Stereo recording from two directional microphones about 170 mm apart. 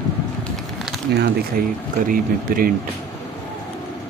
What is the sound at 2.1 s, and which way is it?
Speech, 55° right (ahead or behind).